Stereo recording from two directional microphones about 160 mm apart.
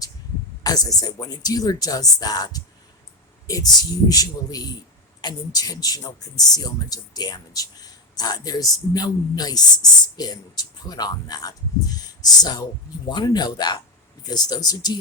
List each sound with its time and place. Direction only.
0.6 s speech: 25° left (ahead or behind)